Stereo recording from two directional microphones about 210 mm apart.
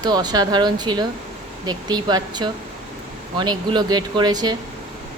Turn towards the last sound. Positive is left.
turn(degrees=-20)  # may be behind; listen again after turning